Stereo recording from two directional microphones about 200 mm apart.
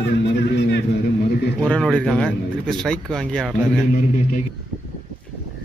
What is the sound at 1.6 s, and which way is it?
A man's voice, centre (ahead or behind).